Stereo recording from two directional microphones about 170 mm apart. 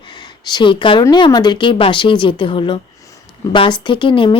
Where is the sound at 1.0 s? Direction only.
25° left (ahead or behind).